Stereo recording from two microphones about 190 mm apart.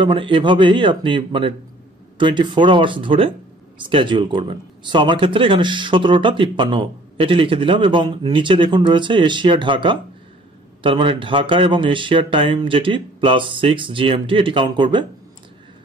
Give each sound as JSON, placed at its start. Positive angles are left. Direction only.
{"t": 0.0, "sound": "speech", "side_deg": -25}